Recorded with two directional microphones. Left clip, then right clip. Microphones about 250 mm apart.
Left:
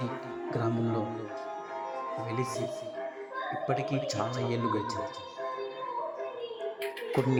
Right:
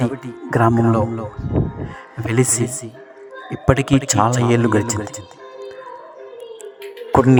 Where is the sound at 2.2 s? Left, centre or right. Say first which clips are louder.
Right 18 dB; right.